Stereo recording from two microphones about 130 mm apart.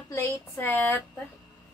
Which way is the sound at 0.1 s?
20° left (ahead or behind).